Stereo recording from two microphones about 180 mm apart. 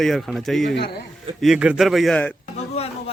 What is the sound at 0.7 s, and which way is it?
Speech, 60° left (ahead or behind).